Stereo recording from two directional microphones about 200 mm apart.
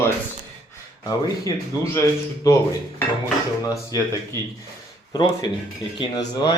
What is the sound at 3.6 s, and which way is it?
Speech, 15° left (ahead or behind).